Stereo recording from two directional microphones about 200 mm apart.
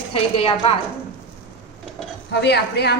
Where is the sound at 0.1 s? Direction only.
30° left (ahead or behind).